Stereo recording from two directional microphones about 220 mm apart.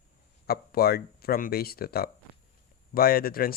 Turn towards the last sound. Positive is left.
turn(degrees=40)  # may be behind; listen again after turning